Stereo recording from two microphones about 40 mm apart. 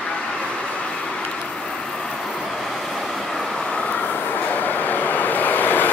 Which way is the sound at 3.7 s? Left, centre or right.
Left.